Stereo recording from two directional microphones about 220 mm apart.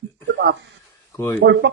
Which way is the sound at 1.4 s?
55° right (ahead or behind).